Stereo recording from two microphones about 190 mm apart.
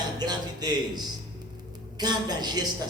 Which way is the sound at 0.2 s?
20° right (ahead or behind).